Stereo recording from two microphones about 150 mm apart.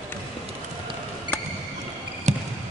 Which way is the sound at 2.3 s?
50° right (ahead or behind).